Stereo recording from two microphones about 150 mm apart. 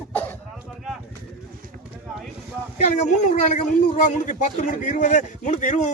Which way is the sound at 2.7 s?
55° left (ahead or behind).